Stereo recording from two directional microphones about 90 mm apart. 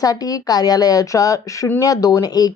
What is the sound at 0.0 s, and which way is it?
A woman's voice, 45° left (ahead or behind).